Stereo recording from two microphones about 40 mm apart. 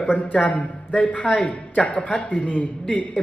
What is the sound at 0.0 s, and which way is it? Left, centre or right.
Speech, left.